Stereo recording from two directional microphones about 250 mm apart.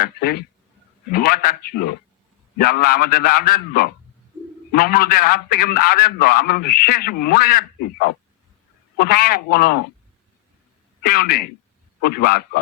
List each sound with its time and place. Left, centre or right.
0.0 s a man's voice: left
9.0 s a man's voice: left
11.0 s a man's voice: left